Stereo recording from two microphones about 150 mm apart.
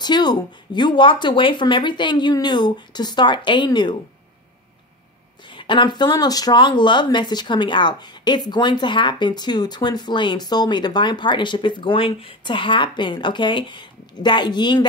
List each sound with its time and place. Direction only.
0.0 s speech: 30° left (ahead or behind)
5.5 s speech: 35° left (ahead or behind)